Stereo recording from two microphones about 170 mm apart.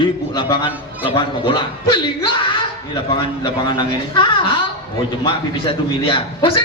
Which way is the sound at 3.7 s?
30° left (ahead or behind).